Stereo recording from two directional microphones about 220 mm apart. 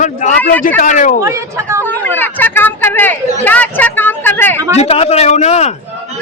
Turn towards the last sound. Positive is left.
turn(degrees=30)  # may be behind; listen again after turning